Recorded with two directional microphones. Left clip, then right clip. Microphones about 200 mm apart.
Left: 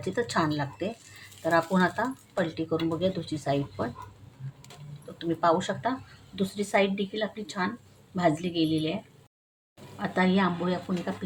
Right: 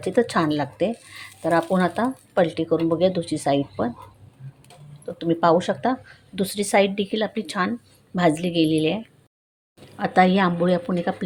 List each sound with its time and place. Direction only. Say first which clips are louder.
0.0 s speech: right 7 dB; 35° right (ahead or behind)
5.1 s speech: right 6 dB; 30° right (ahead or behind)
10.0 s speech: right 8 dB; 40° right (ahead or behind)